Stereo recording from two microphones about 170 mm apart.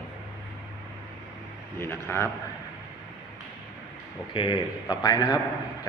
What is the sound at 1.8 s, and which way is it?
Speech, 10° left (ahead or behind).